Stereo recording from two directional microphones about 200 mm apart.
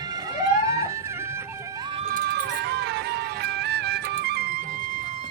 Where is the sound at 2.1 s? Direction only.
55° right (ahead or behind).